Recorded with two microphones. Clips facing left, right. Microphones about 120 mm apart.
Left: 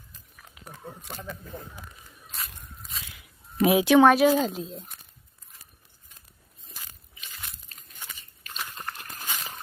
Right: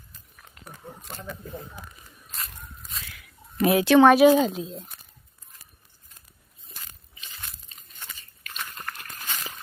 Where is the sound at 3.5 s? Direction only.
10° left (ahead or behind).